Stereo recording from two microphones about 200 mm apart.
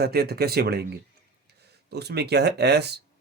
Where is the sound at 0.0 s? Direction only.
55° right (ahead or behind).